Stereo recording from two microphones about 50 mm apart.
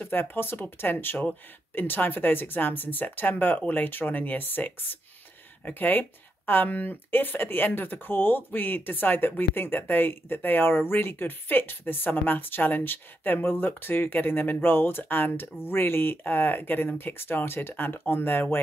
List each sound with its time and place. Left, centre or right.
0.0 s speech: left